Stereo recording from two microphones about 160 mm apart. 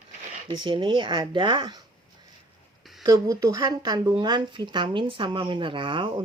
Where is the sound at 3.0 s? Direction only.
20° right (ahead or behind).